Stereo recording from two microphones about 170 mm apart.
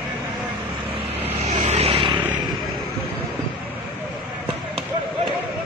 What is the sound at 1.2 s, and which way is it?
Vehicle, 40° right (ahead or behind).